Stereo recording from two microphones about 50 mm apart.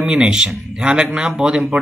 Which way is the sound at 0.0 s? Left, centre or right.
Centre.